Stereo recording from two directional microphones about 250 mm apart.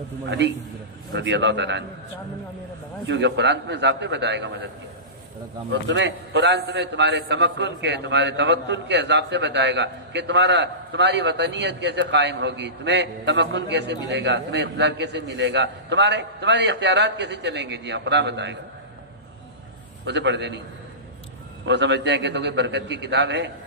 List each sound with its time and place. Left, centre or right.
0.3 s a man's voice: right
3.1 s a man's voice: right
5.7 s a man's voice: right
20.1 s a man's voice: right
21.6 s a man's voice: right